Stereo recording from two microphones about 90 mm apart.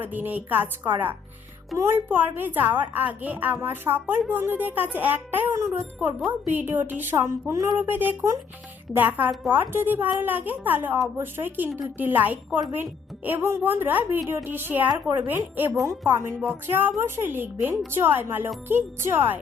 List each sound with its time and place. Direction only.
0.0 s a woman's voice: 20° right (ahead or behind)
1.7 s a woman's voice: centre (ahead or behind)
2.0 s a woman's voice: 20° right (ahead or behind)
7.8 s a woman's voice: 20° right (ahead or behind)